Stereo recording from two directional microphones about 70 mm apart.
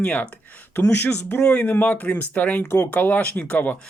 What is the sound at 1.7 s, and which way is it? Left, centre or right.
Speech, left.